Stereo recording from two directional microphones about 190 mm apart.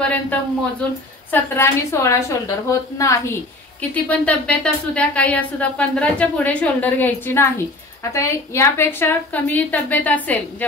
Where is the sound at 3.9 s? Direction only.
5° left (ahead or behind).